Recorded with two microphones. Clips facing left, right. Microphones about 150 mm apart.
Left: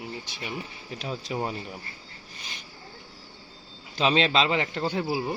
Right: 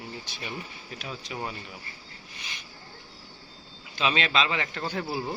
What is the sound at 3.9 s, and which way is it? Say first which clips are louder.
Speech: left 4 dB; 30° left (ahead or behind).